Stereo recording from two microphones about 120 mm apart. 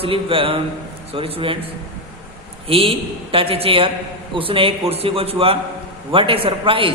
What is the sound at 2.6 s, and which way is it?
A man's voice, 50° right (ahead or behind).